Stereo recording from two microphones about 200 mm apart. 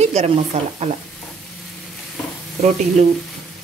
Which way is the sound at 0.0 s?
35° right (ahead or behind).